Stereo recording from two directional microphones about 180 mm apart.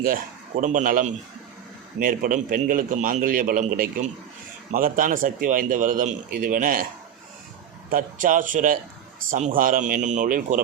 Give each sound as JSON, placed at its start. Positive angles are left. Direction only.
{"t": 0.0, "sound": "a man's voice", "side_deg": -50}
{"t": 7.9, "sound": "a man's voice", "side_deg": -50}